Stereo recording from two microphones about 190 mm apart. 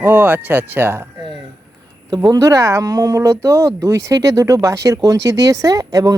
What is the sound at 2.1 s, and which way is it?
Speech, 20° right (ahead or behind).